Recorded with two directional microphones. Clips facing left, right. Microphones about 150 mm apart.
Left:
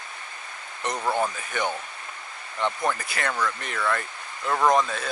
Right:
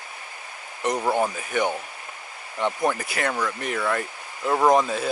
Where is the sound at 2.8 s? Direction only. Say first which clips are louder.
Right 3 dB; 15° right (ahead or behind).